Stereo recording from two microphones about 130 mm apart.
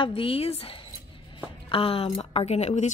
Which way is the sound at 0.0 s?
45° left (ahead or behind).